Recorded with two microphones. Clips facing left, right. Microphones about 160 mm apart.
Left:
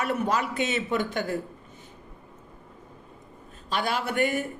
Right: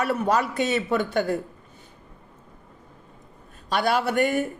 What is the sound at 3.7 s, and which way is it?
Speech, 40° right (ahead or behind).